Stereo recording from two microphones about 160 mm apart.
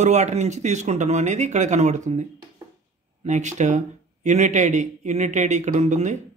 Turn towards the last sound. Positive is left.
turn(degrees=-50)  # may be behind; listen again after turning